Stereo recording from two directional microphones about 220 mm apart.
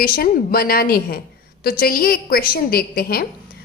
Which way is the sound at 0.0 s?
40° left (ahead or behind).